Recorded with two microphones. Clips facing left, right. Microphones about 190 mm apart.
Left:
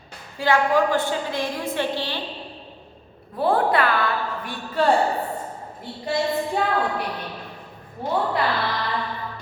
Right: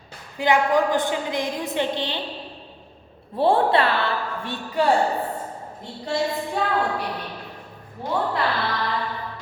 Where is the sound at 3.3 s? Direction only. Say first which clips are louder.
Right 2 dB; 25° right (ahead or behind).